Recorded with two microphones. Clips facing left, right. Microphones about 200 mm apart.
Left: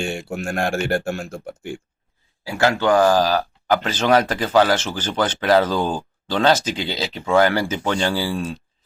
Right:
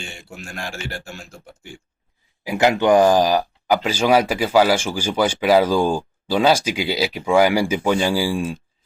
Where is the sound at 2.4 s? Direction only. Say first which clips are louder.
Right 2 dB; 15° right (ahead or behind).